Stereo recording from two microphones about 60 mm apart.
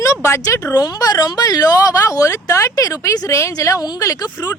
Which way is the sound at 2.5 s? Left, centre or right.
Left.